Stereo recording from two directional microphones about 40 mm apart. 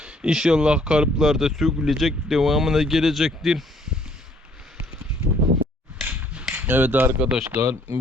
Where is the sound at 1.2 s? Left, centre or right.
Centre.